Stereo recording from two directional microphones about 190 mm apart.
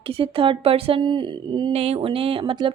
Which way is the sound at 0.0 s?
30° right (ahead or behind).